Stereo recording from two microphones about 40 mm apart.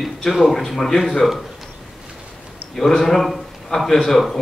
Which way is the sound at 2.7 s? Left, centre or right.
Centre.